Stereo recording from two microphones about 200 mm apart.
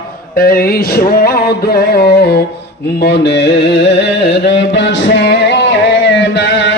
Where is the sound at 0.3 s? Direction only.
45° left (ahead or behind).